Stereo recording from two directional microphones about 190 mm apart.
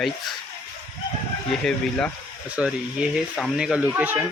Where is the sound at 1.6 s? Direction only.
5° left (ahead or behind).